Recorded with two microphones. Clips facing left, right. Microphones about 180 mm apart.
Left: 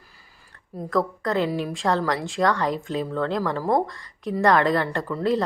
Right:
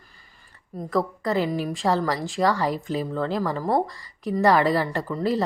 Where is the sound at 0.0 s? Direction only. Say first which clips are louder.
Left 1 dB; 5° left (ahead or behind).